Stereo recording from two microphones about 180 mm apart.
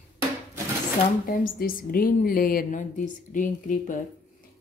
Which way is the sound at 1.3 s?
50° left (ahead or behind).